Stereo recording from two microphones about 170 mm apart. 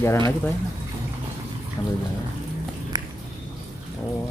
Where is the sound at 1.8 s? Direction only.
15° left (ahead or behind).